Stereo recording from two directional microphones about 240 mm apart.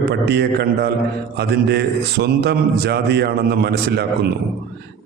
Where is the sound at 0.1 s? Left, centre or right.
Right.